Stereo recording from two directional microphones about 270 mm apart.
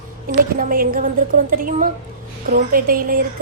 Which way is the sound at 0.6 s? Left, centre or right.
Right.